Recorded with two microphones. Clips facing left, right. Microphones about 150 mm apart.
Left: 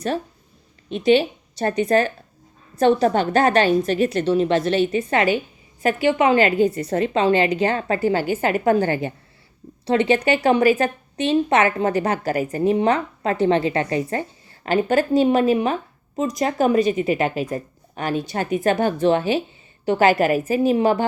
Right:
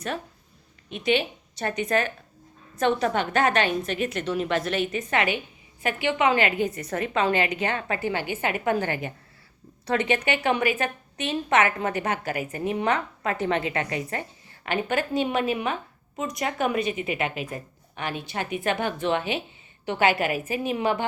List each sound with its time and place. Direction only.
0.9 s a woman's voice: 35° left (ahead or behind)